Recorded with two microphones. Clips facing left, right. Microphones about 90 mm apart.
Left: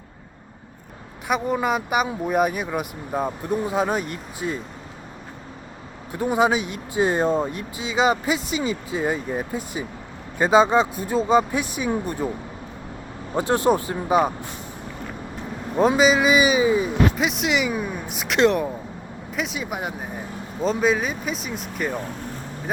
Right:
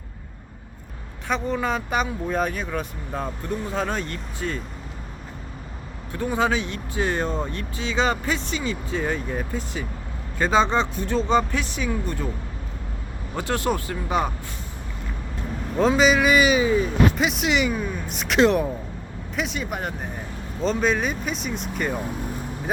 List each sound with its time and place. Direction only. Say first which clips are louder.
1.3 s speech: left 2 dB; 15° left (ahead or behind)
6.1 s speech: left 3 dB; 20° left (ahead or behind)
13.3 s speech: left 5 dB; 20° left (ahead or behind)
15.7 s speech: left 1 dB; 10° left (ahead or behind)
16.1 s speech: even; 20° left (ahead or behind)
17.2 s speech: even; centre (ahead or behind)